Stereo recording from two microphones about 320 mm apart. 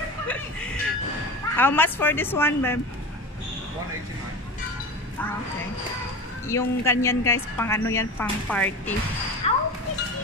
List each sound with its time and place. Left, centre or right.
0.3 s chuckle: centre
1.6 s a woman's voice: centre
6.4 s a woman's voice: centre
9.4 s music: centre